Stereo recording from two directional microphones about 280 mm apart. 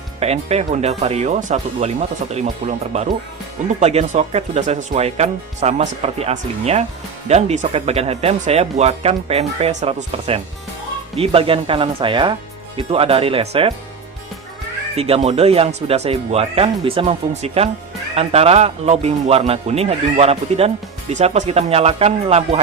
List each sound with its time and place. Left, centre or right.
0.2 s speech: right
14.9 s speech: right